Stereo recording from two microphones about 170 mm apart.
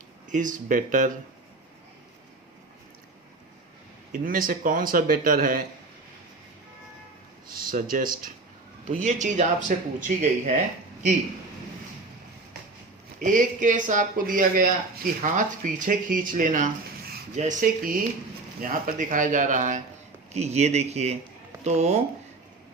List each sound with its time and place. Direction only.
0.3 s speech: 50° right (ahead or behind)
4.1 s a man's voice: 55° right (ahead or behind)
7.4 s speech: 55° right (ahead or behind)
13.2 s speech: 50° right (ahead or behind)